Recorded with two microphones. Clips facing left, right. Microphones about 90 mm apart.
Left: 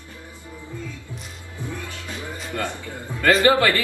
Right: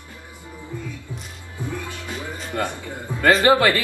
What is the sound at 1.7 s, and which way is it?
Music, 20° right (ahead or behind).